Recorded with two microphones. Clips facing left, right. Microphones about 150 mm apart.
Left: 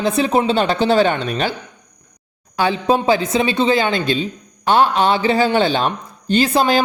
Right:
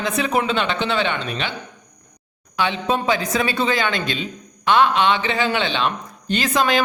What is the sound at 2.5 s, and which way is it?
Speech, 35° left (ahead or behind).